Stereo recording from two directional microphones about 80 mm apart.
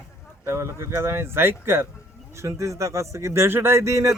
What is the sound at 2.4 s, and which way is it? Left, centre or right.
Speech, right.